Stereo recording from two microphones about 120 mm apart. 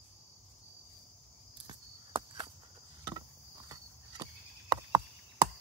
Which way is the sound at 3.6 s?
35° right (ahead or behind).